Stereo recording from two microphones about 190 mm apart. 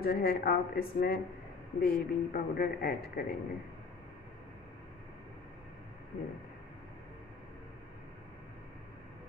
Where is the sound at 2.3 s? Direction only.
50° left (ahead or behind).